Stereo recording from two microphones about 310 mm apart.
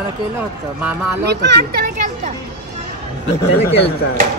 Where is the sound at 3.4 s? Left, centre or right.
Centre.